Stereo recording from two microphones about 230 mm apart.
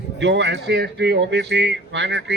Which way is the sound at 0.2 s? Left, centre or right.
Right.